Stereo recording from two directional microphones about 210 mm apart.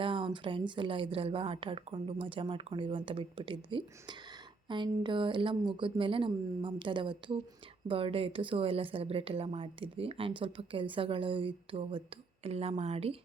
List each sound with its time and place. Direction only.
0.0 s a woman's voice: 25° right (ahead or behind)